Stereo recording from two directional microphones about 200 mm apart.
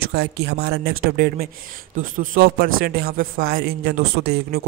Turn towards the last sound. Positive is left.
turn(degrees=-50)  # may be behind; listen again after turning